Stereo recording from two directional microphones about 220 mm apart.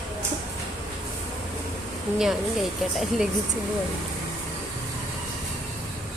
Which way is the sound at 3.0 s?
Centre (ahead or behind).